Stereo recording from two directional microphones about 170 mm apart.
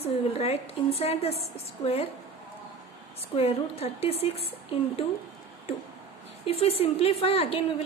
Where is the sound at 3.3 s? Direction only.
35° left (ahead or behind).